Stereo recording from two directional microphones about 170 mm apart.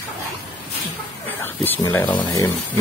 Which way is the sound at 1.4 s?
10° left (ahead or behind).